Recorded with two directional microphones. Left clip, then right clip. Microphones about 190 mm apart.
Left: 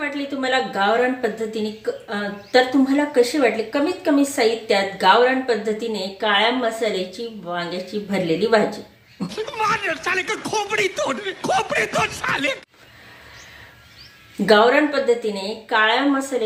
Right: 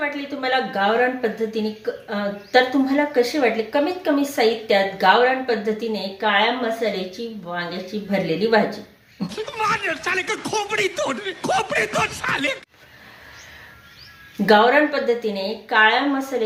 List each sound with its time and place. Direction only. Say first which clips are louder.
0.0 s a woman's voice: even; 10° left (ahead or behind)
14.4 s a woman's voice: even; 5° left (ahead or behind)